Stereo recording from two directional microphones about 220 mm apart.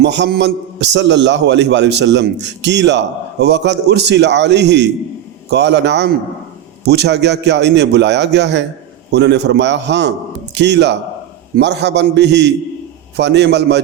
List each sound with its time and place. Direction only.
0.0 s a man's voice: 50° right (ahead or behind)